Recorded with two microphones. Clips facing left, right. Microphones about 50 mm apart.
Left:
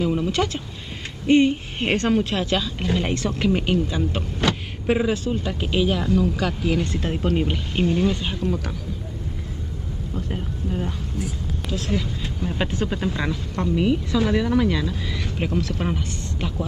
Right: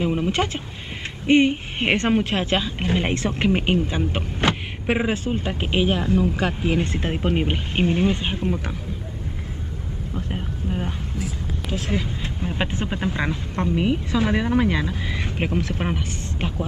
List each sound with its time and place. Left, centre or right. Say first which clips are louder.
0.0 s a sound: even; right
1.2 s a woman's voice: even; right
10.1 s a woman's voice: even; right